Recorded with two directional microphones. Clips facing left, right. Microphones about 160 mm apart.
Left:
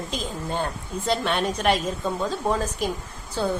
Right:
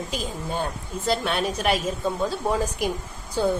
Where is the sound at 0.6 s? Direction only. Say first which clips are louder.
Even; 5° right (ahead or behind).